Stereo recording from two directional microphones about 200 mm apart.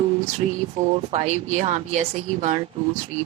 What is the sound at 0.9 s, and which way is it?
Speech, 30° right (ahead or behind).